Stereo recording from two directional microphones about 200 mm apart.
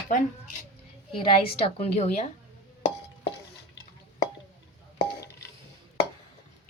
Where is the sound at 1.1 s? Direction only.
25° left (ahead or behind).